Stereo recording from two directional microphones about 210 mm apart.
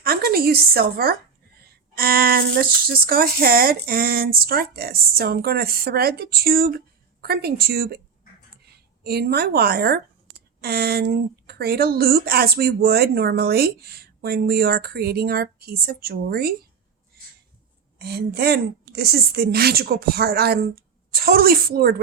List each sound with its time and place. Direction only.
0.0 s a woman's voice: 45° right (ahead or behind)
9.0 s speech: 50° right (ahead or behind)
18.0 s speech: 50° right (ahead or behind)